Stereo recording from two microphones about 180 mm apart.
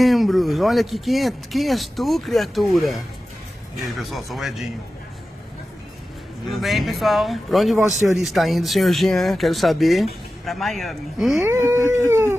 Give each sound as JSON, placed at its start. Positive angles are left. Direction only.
{"t": 0.0, "sound": "speech", "side_deg": 0}
{"t": 4.0, "sound": "speech", "side_deg": 0}
{"t": 6.6, "sound": "speech", "side_deg": 0}
{"t": 11.4, "sound": "a sound", "side_deg": -15}